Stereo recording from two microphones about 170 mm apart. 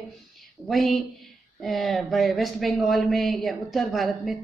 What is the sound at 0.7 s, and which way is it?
Speech, centre (ahead or behind).